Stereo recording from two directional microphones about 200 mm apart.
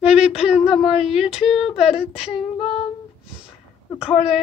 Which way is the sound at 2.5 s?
30° left (ahead or behind).